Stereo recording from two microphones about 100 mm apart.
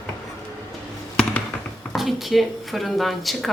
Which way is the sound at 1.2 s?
10° left (ahead or behind).